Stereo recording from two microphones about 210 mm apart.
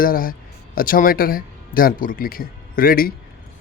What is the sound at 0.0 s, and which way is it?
Speech, 45° left (ahead or behind).